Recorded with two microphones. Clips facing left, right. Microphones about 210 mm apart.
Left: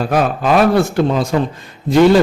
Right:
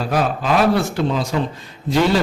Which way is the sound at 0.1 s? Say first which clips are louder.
Left 4 dB; 55° left (ahead or behind).